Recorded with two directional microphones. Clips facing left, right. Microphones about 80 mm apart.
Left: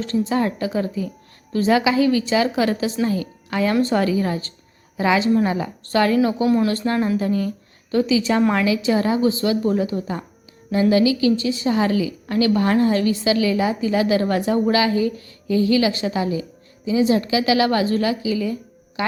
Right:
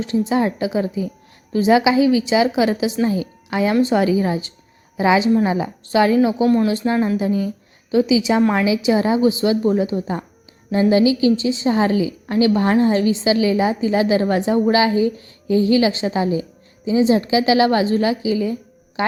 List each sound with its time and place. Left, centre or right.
0.0 s a woman's voice: centre
6.2 s a woman's voice: centre
8.5 s a woman's voice: centre